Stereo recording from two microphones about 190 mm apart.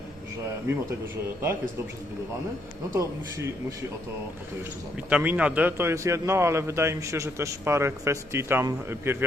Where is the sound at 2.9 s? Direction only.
15° right (ahead or behind).